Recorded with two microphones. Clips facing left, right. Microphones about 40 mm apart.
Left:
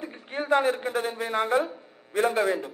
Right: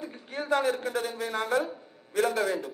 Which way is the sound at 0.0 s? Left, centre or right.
Left.